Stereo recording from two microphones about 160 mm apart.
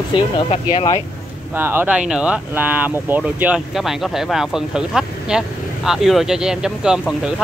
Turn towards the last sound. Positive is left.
turn(degrees=-5)  # may be behind; listen again after turning